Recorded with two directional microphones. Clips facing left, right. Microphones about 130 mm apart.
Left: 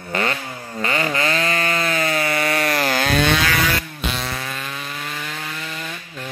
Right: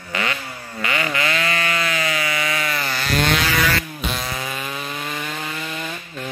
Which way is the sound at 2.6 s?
75° left (ahead or behind).